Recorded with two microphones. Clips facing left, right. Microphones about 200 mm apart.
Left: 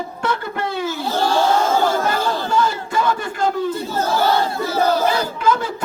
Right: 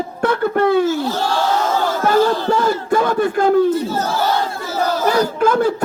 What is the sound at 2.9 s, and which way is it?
Speech, 55° right (ahead or behind).